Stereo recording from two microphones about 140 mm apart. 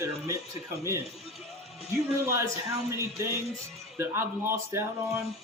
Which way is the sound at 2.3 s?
20° right (ahead or behind).